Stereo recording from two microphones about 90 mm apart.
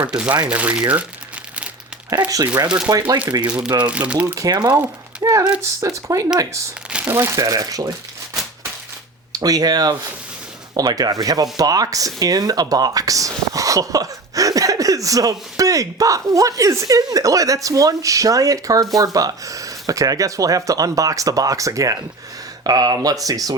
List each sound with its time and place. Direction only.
0.0 s speech: 15° right (ahead or behind)
2.2 s speech: 15° right (ahead or behind)
3.3 s speech: 45° right (ahead or behind)
3.8 s speech: 15° right (ahead or behind)
4.4 s speech: 45° right (ahead or behind)
5.2 s speech: 40° right (ahead or behind)
7.1 s speech: 25° right (ahead or behind)
7.3 s speech: 40° right (ahead or behind)
9.3 s speech: 45° right (ahead or behind)